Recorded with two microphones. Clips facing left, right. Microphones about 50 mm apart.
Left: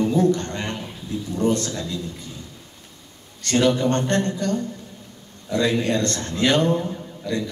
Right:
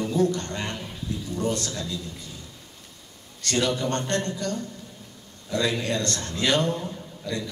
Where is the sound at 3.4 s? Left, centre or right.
Left.